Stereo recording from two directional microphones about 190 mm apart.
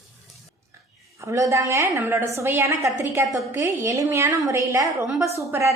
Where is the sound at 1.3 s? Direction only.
15° right (ahead or behind).